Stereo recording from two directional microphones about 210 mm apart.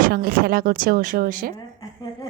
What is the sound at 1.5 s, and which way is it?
Speech, 20° left (ahead or behind).